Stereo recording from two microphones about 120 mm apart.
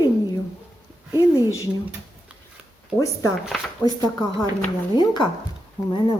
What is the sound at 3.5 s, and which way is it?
Speech, centre (ahead or behind).